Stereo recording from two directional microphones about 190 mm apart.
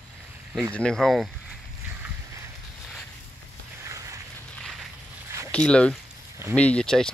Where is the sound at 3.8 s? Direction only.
15° right (ahead or behind).